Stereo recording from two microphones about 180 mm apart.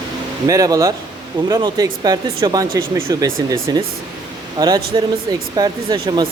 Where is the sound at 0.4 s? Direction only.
20° right (ahead or behind).